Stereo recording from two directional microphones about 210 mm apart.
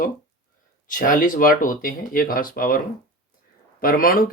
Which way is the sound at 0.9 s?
40° left (ahead or behind).